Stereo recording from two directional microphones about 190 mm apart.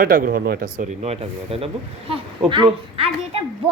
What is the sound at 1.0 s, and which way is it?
A woman's voice, 35° right (ahead or behind).